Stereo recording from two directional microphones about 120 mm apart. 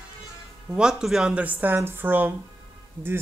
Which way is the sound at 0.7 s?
5° right (ahead or behind).